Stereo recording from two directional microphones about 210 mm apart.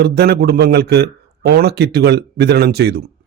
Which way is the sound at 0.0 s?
50° right (ahead or behind).